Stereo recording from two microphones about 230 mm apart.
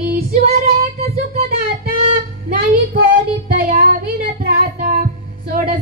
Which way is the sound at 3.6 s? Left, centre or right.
Right.